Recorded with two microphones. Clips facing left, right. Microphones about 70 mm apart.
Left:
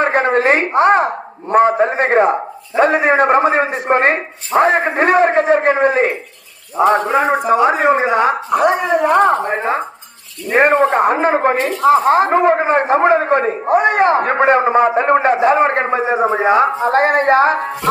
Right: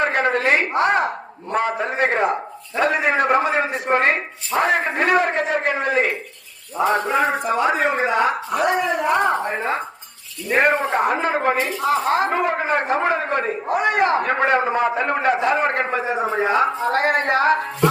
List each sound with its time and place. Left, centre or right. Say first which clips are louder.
0.0 s a man's voice: left 5 dB; left
7.1 s a man's voice: left 5 dB; left
7.7 s speech: left 6 dB; left
8.1 s a man's voice: left 5 dB; left
10.6 s a man's voice: left 6 dB; left